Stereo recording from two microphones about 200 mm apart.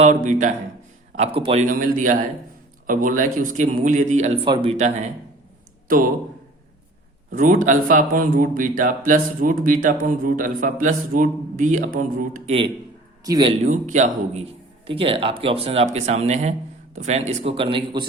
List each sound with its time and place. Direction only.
0.0 s a man's voice: 40° right (ahead or behind)
7.3 s a man's voice: 40° right (ahead or behind)
13.2 s a man's voice: 20° right (ahead or behind)
13.7 s a man's voice: 40° right (ahead or behind)